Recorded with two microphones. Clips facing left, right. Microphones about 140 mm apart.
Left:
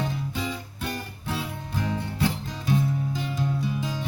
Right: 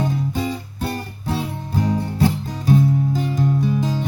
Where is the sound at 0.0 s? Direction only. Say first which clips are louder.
Right 7 dB; 40° right (ahead or behind).